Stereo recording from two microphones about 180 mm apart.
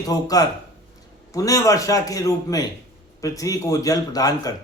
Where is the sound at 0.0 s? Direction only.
20° left (ahead or behind).